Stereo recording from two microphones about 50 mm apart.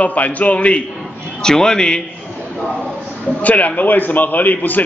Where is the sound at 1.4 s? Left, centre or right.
Centre.